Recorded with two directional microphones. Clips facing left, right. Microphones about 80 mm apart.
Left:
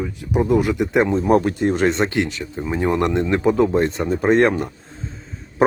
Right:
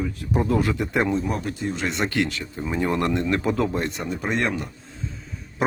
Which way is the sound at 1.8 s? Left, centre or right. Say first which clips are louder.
Left 5 dB; left.